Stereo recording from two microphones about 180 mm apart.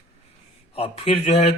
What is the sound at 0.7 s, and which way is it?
Speech, 35° left (ahead or behind).